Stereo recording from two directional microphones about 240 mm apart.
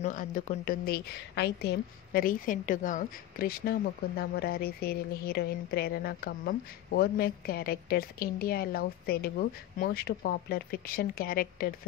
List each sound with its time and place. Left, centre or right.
0.0 s speech: left